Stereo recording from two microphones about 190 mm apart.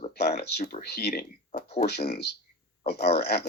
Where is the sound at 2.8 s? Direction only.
60° left (ahead or behind).